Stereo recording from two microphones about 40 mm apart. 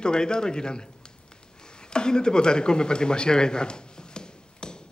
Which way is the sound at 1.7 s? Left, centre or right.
Left.